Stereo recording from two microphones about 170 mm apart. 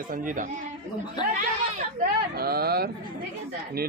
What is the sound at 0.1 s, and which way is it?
Speech, 50° right (ahead or behind).